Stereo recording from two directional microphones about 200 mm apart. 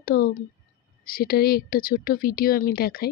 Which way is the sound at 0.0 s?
50° left (ahead or behind).